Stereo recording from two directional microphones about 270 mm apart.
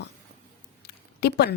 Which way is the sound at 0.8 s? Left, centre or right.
Left.